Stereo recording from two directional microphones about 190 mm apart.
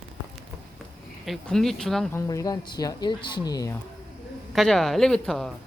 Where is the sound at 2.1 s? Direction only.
20° left (ahead or behind).